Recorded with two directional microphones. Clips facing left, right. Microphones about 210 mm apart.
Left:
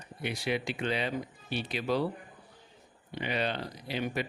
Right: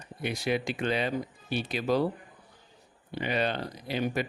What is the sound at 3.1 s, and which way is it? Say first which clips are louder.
Speech: right 3 dB; 45° right (ahead or behind).